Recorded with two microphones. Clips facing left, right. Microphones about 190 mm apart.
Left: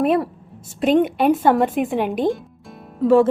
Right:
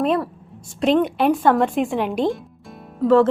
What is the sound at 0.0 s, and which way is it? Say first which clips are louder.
A woman's voice: left 2 dB; 10° left (ahead or behind).